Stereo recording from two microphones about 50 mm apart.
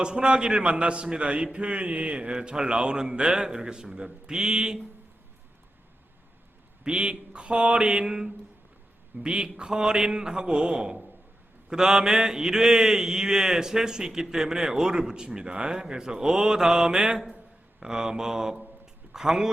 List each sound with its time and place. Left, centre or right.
0.0 s mantra: centre
1.5 s speech: right
6.8 s mantra: centre
9.1 s speech: centre